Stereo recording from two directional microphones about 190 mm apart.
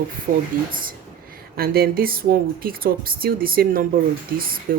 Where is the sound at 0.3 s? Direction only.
50° right (ahead or behind).